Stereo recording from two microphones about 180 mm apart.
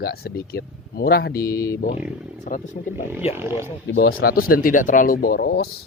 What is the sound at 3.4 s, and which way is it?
Speech, 15° right (ahead or behind).